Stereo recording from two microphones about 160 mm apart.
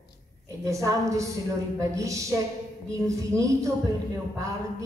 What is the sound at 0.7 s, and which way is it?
A man's voice, 20° right (ahead or behind).